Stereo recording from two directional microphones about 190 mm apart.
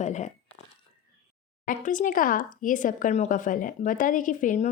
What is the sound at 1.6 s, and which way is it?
Speech, 45° left (ahead or behind).